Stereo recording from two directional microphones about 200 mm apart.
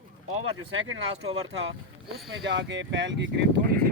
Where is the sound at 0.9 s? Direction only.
85° right.